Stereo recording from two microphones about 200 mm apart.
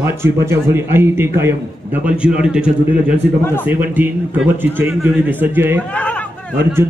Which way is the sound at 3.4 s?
10° left (ahead or behind).